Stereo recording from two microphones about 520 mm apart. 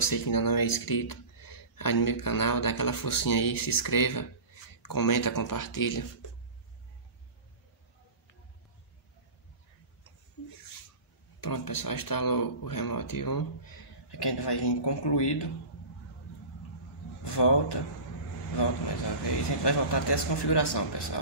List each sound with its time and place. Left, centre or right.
0.0 s speech: left
11.4 s speech: left
17.2 s speech: left
19.2 s speech: left